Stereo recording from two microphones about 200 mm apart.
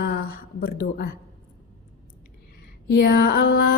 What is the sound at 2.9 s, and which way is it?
Speech, 50° left (ahead or behind).